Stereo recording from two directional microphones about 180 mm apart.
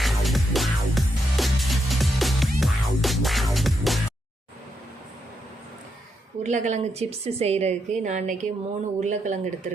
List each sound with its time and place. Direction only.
0.0 s music: centre (ahead or behind)
6.4 s a woman's voice: 40° right (ahead or behind)